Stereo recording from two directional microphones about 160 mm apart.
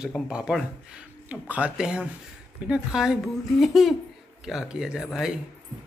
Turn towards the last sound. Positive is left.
turn(degrees=-5)  # may be behind; listen again after turning